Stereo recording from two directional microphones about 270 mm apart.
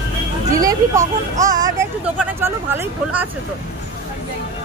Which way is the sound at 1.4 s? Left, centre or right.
Right.